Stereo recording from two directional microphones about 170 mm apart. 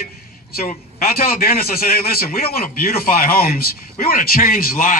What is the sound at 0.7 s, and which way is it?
A man's voice, 60° left (ahead or behind).